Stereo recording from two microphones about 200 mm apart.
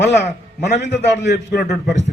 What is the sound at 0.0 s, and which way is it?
A man's voice, 60° left (ahead or behind).